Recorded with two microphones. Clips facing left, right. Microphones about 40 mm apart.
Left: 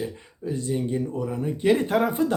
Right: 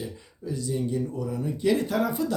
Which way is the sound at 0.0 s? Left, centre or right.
Left.